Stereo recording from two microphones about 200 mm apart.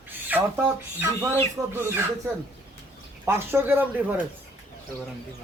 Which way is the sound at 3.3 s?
10° right (ahead or behind).